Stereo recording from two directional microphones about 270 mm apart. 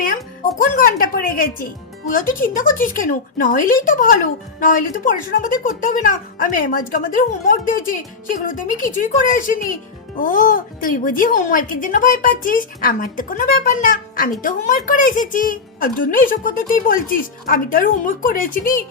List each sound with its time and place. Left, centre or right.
0.6 s speech: left